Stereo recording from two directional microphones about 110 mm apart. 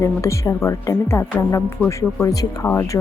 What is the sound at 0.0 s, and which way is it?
A woman's voice, 25° left (ahead or behind).